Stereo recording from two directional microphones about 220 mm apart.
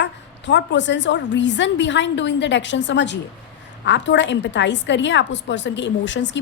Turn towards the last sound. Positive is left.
turn(degrees=55)  # may be behind; listen again after turning